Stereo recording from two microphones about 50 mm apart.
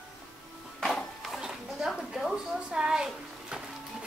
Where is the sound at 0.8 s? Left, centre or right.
Centre.